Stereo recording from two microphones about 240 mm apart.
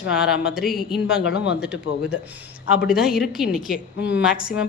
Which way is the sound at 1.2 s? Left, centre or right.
Left.